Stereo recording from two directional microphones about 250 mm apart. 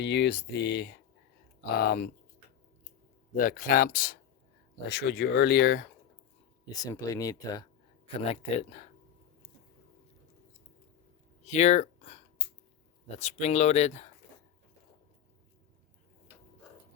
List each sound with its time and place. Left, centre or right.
0.0 s speech: left
3.3 s speech: left
6.7 s speech: centre
8.0 s speech: left
11.4 s a sound: left
13.1 s speech: left